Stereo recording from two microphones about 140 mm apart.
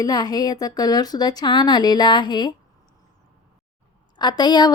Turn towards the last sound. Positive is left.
turn(degrees=30)  # may be behind; listen again after turning